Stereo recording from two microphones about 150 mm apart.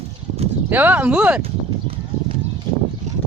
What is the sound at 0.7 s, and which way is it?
Speech, 10° right (ahead or behind).